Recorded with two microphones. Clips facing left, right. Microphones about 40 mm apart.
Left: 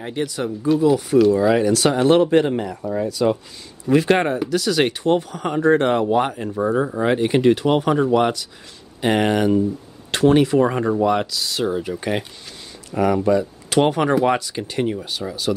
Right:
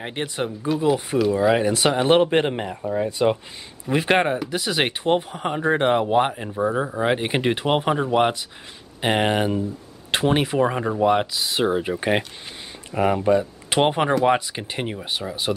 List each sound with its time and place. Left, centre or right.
0.0 s speech: right
10.6 s speech: centre
11.0 s speech: right
15.5 s speech: centre